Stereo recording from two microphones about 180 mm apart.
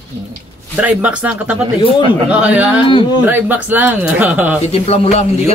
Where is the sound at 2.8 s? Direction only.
25° left (ahead or behind).